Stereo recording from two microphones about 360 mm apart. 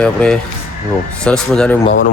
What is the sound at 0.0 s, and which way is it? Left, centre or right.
Speech, centre.